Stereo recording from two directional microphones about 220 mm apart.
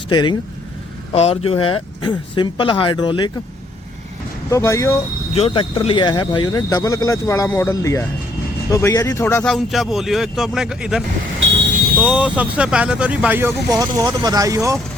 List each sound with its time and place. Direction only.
0.1 s speech: 20° left (ahead or behind)
4.5 s speech: 15° left (ahead or behind)
5.3 s speech: 25° left (ahead or behind); by 14.8 s 15° right (ahead or behind)